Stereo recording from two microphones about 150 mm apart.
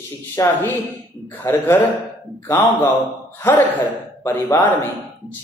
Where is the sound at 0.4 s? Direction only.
20° left (ahead or behind).